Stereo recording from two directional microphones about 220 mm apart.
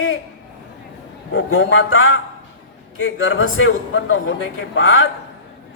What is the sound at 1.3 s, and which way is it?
A man's voice, 60° left (ahead or behind).